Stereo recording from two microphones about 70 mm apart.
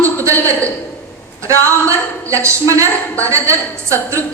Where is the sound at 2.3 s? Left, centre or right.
Right.